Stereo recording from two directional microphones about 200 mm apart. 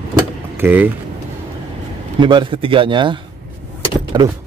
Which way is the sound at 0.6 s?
10° right (ahead or behind).